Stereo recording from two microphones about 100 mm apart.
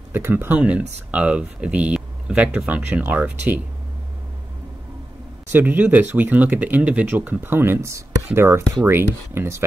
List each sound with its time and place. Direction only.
0.1 s speech: 20° right (ahead or behind)
5.5 s speech: 20° right (ahead or behind)